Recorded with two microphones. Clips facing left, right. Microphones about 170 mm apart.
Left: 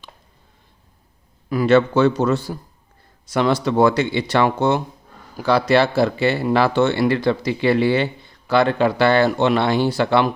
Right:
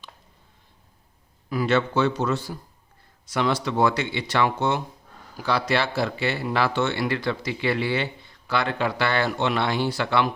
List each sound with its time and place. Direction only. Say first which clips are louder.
1.5 s a man's voice: left 7 dB; 50° left (ahead or behind); by 10.2 s 30° left (ahead or behind)